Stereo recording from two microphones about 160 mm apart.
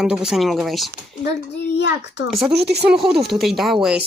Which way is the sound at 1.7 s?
90° left.